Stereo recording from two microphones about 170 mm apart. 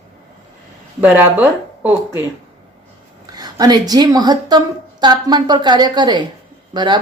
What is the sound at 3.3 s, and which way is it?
A woman's voice, 25° right (ahead or behind).